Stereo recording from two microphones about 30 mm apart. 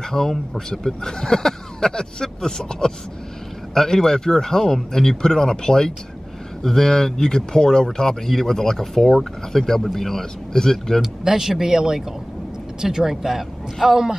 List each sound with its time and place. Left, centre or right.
0.1 s speech: centre
11.0 s speech: centre